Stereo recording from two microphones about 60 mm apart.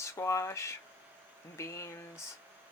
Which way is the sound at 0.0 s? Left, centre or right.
Left.